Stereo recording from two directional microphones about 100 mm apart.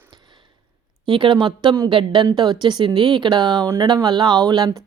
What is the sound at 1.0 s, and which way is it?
A woman's voice, 55° right (ahead or behind).